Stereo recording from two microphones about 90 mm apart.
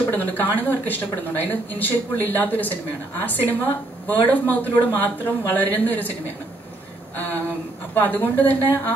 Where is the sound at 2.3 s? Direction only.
20° left (ahead or behind).